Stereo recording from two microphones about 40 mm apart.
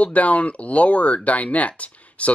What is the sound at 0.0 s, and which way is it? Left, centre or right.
Speech, left.